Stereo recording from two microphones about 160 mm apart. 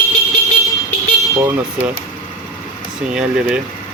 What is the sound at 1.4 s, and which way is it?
Speech, 15° right (ahead or behind).